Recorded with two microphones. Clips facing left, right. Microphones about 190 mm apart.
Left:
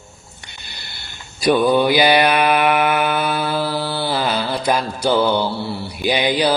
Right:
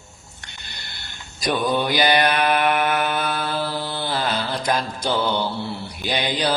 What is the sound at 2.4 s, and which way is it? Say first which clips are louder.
Mantra: left 4 dB; 10° left (ahead or behind).